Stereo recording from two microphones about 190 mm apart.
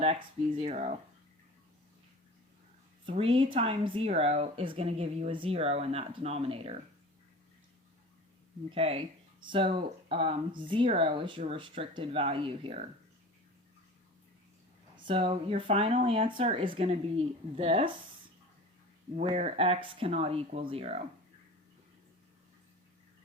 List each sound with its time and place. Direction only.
0.0 s speech: 35° right (ahead or behind)
3.1 s speech: 30° right (ahead or behind)
8.7 s speech: 30° right (ahead or behind)
15.0 s speech: 25° right (ahead or behind)
19.1 s speech: 35° right (ahead or behind)